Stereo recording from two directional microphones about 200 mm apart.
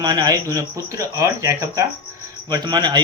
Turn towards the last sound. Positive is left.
turn(degrees=-20)  # may be behind; listen again after turning